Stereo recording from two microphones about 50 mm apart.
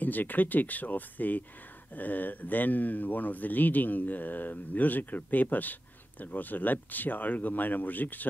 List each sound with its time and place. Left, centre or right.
0.0 s speech: left